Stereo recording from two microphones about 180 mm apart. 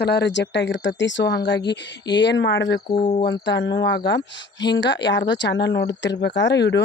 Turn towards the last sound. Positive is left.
turn(degrees=75)  # may be behind; listen again after turning